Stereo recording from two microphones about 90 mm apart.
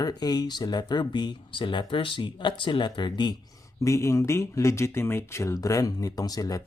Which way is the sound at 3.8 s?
35° left (ahead or behind).